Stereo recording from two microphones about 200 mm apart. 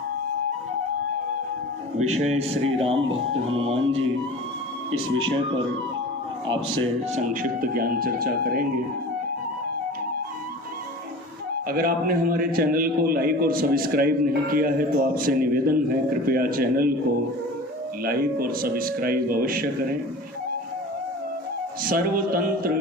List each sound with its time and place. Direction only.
2.0 s a man's voice: 35° right (ahead or behind)
7.2 s a man's voice: 40° right (ahead or behind)
11.7 s a man's voice: 45° right (ahead or behind)
18.0 s a man's voice: 45° right (ahead or behind)
21.8 s a man's voice: 45° right (ahead or behind)